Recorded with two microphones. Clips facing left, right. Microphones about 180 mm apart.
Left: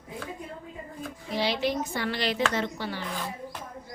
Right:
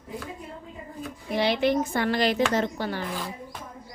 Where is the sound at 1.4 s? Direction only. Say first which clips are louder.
Right 5 dB; 55° right (ahead or behind).